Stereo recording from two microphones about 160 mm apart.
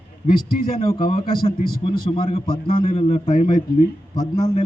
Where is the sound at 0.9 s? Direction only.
30° left (ahead or behind).